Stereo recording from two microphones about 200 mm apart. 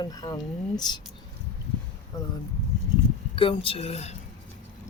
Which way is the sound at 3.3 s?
25° left (ahead or behind).